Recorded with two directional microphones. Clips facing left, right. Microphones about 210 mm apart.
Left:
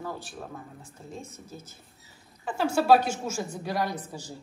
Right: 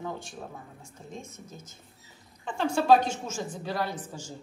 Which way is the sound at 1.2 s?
30° left (ahead or behind).